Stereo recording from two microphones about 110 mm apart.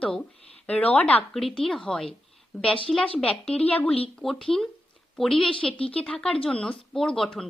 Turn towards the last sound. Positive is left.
turn(degrees=5)  # may be behind; listen again after turning